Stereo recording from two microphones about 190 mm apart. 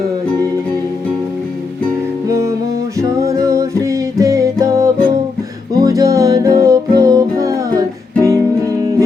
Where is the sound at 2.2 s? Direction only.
15° right (ahead or behind).